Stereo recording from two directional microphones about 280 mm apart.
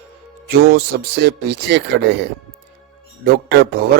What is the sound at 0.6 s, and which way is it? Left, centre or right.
Speech, right.